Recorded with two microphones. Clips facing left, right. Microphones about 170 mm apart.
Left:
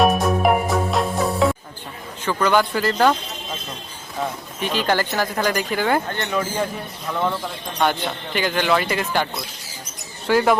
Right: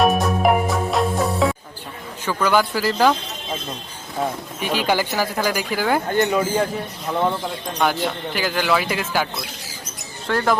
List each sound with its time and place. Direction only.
0.0 s music: centre (ahead or behind)
2.2 s speech: 5° right (ahead or behind)
4.6 s speech: 10° right (ahead or behind)
7.8 s speech: 5° right (ahead or behind)